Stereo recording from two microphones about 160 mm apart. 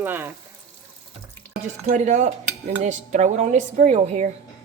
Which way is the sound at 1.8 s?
45° right (ahead or behind).